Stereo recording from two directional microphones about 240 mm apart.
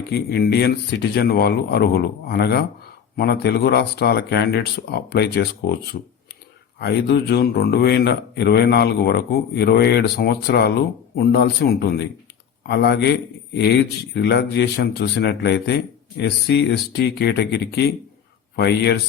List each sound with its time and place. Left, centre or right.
0.1 s speech: left